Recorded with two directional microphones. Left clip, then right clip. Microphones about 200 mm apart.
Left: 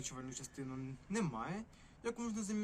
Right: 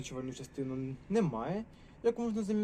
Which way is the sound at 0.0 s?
60° left (ahead or behind).